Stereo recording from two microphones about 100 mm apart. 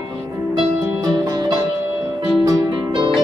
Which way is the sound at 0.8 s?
40° right (ahead or behind).